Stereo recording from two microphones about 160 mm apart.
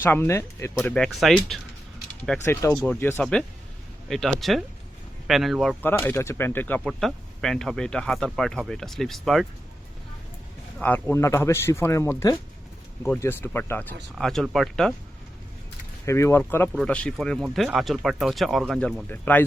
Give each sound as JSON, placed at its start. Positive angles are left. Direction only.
{"t": 0.0, "sound": "speech", "side_deg": 15}
{"t": 0.8, "sound": "speech", "side_deg": 5}
{"t": 2.4, "sound": "speech", "side_deg": 15}
{"t": 5.8, "sound": "speech", "side_deg": 10}
{"t": 10.8, "sound": "speech", "side_deg": 10}
{"t": 16.0, "sound": "speech", "side_deg": 15}